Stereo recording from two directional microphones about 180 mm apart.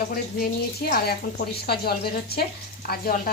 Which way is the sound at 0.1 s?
55° left (ahead or behind).